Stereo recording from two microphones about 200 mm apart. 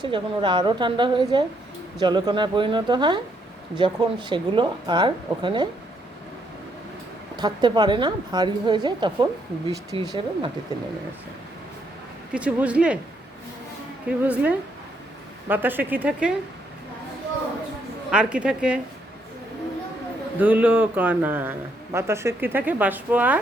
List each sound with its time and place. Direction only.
0.0 s a woman's voice: 25° right (ahead or behind)
7.3 s a woman's voice: 20° right (ahead or behind)
12.3 s speech: 5° right (ahead or behind)
14.1 s speech: 5° right (ahead or behind)
18.1 s speech: 5° right (ahead or behind)
20.4 s speech: 10° right (ahead or behind)